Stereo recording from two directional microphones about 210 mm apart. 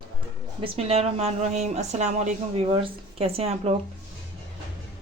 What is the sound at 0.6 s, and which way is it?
Speech, 30° right (ahead or behind).